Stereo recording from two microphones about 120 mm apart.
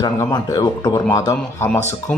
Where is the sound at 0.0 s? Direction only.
35° left (ahead or behind).